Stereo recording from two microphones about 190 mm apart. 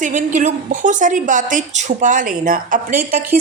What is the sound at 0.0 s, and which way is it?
A woman's voice, 40° right (ahead or behind).